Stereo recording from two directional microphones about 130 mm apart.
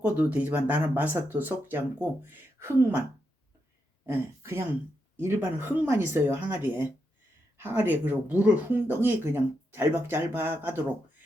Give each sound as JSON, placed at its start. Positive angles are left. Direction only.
{"t": 0.0, "sound": "speech", "side_deg": -10}
{"t": 4.0, "sound": "speech", "side_deg": -20}